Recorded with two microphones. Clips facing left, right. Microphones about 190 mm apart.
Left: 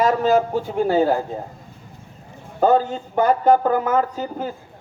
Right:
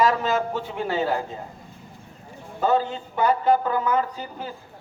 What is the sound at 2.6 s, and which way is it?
Speech, 45° left (ahead or behind).